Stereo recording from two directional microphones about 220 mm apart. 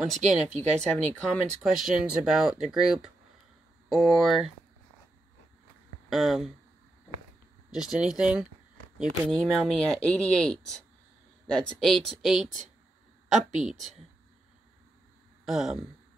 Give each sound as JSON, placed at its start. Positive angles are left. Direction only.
{"t": 0.0, "sound": "speech", "side_deg": 0}
{"t": 0.5, "sound": "speech", "side_deg": -30}
{"t": 1.6, "sound": "speech", "side_deg": 0}
{"t": 6.0, "sound": "speech", "side_deg": 0}
{"t": 7.7, "sound": "speech", "side_deg": -5}
{"t": 13.3, "sound": "speech", "side_deg": -30}
{"t": 15.4, "sound": "speech", "side_deg": 0}